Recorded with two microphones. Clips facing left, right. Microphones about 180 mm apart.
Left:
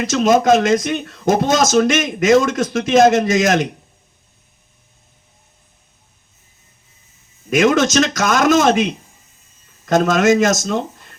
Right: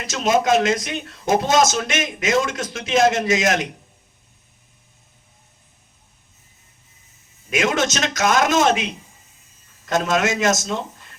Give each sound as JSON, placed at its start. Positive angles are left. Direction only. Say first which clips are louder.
{"t": 0.0, "sound": "speech", "louder": "left 6 dB", "side_deg": 45}
{"t": 7.5, "sound": "speech", "louder": "left 7 dB", "side_deg": 45}